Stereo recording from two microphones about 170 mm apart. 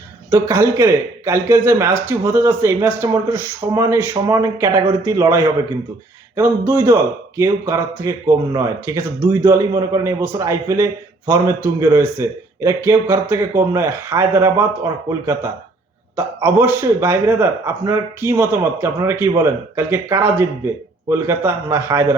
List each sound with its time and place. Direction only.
0.3 s speech: 20° right (ahead or behind)
6.7 s speech: 15° right (ahead or behind)
16.1 s speech: 10° right (ahead or behind)